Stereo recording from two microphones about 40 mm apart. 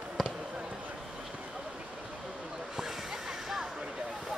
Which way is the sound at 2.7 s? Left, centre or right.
Centre.